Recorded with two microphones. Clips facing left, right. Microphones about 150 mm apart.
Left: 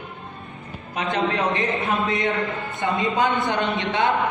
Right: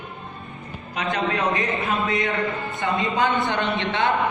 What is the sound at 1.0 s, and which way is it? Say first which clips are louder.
Speech: left 1 dB; 20° left (ahead or behind).